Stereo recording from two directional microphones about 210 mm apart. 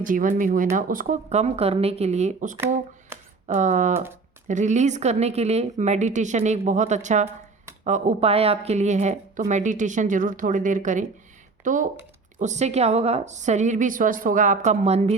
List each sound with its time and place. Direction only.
0.0 s a woman's voice: 40° right (ahead or behind)